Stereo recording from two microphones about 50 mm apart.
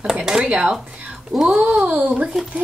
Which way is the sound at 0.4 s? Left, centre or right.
Right.